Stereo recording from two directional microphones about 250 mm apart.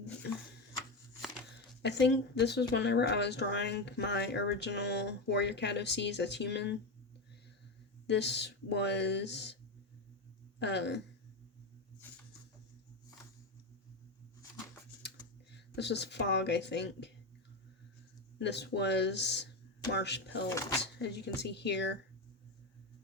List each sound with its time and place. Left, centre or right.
1.8 s speech: left
8.0 s speech: left
10.6 s speech: left
15.5 s speech: left
18.3 s speech: left
20.8 s a sound: left
21.4 s speech: left